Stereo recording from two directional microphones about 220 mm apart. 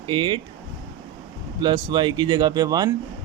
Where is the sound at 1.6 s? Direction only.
20° right (ahead or behind).